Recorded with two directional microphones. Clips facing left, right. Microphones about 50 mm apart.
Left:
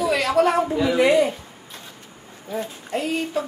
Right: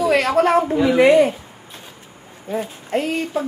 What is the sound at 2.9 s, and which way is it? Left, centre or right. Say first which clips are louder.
Speech: right 5 dB; right.